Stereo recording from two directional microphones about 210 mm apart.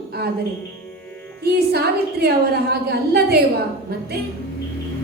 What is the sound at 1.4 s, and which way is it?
A woman's voice, 50° right (ahead or behind).